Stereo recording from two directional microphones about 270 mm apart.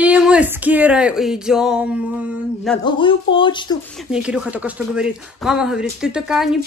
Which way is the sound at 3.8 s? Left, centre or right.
Centre.